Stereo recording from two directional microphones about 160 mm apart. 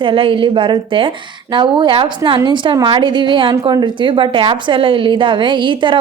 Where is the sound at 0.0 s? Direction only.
35° right (ahead or behind).